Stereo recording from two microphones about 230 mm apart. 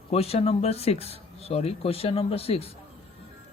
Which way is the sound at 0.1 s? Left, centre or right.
Left.